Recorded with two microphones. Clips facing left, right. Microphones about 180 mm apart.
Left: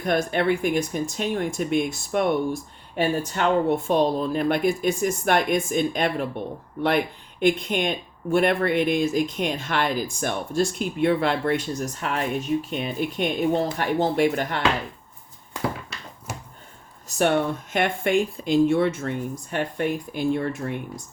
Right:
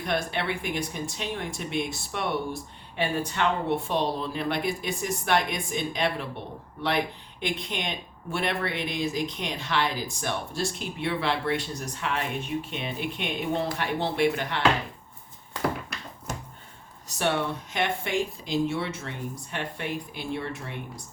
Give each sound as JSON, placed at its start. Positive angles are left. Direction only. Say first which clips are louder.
{"t": 0.0, "sound": "speech", "louder": "left 6 dB", "side_deg": 45}
{"t": 17.2, "sound": "speech", "louder": "left 6 dB", "side_deg": 50}